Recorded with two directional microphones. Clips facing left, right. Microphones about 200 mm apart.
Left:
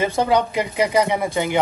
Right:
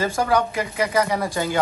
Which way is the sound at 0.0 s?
20° left (ahead or behind).